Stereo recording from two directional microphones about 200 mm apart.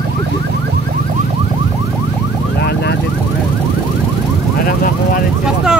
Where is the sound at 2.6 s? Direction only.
60° left (ahead or behind).